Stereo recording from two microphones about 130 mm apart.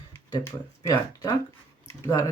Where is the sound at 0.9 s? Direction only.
30° left (ahead or behind).